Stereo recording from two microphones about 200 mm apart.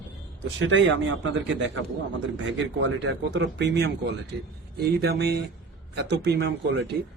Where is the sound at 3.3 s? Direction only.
60° right (ahead or behind).